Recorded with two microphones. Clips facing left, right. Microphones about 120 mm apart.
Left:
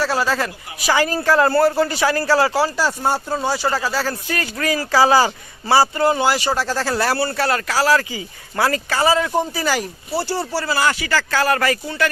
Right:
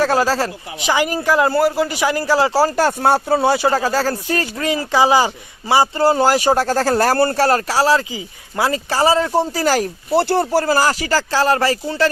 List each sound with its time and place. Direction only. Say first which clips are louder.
0.0 s speech: right 4 dB; 45° right (ahead or behind)
0.9 s speech: even; 15° right (ahead or behind)
2.5 s speech: right 3 dB; 40° right (ahead or behind)
2.7 s speech: right 5 dB; 60° right (ahead or behind)
3.7 s speech: right 4 dB; 45° right (ahead or behind); by 5.9 s 15° right (ahead or behind)
5.9 s speech: right 3 dB; 35° right (ahead or behind)
8.9 s speech: right 5 dB; 30° right (ahead or behind)
10.2 s speech: right 7 dB; 55° right (ahead or behind); by 12.0 s 30° right (ahead or behind)